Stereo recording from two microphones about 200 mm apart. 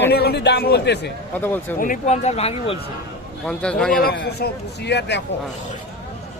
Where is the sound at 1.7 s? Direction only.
40° left (ahead or behind).